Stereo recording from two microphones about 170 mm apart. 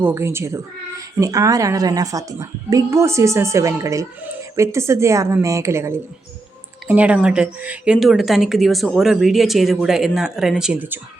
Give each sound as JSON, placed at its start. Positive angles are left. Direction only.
{"t": 0.0, "sound": "a woman's voice", "side_deg": -15}